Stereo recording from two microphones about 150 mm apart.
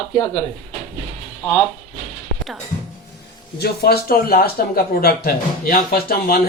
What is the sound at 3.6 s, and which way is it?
Speech, 90° left.